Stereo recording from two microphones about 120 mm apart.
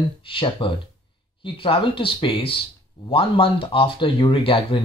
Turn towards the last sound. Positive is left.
turn(degrees=45)  # may be behind; listen again after turning